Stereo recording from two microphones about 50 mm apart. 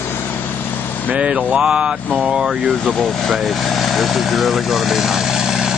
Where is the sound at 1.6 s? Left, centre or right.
Centre.